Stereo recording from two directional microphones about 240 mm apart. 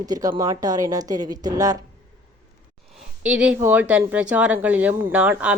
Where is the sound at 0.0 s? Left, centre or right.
Centre.